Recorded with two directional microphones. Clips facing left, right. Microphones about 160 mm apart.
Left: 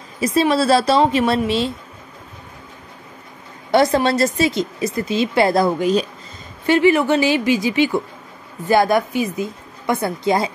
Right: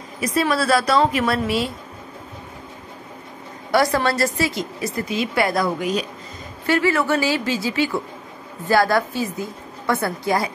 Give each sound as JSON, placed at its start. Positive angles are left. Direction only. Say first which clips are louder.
{"t": 0.2, "sound": "a woman's voice", "louder": "left 4 dB", "side_deg": 25}
{"t": 3.7, "sound": "a woman's voice", "louder": "left 3 dB", "side_deg": 25}
{"t": 6.6, "sound": "a woman's voice", "louder": "left 5 dB", "side_deg": 20}